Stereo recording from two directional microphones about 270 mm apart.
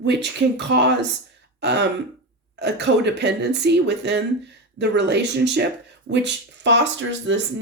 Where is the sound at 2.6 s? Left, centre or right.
Right.